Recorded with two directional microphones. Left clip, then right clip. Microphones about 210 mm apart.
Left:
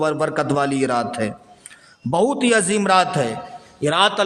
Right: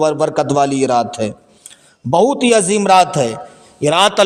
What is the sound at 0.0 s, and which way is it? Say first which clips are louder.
A man's voice: right 5 dB; 20° right (ahead or behind).